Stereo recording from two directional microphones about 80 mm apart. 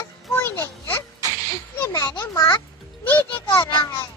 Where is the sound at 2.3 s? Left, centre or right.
Left.